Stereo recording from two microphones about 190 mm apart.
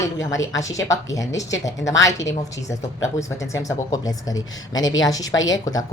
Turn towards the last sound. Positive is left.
turn(degrees=20)  # may be behind; listen again after turning